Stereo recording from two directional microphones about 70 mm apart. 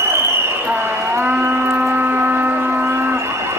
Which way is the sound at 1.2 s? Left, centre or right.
Right.